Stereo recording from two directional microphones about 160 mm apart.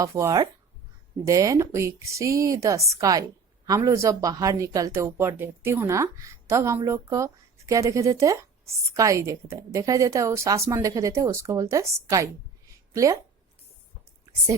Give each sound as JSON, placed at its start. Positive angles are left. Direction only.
{"t": 0.0, "sound": "a woman's voice", "side_deg": -20}